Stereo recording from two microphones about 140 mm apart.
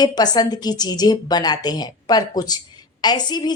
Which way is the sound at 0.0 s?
30° left (ahead or behind).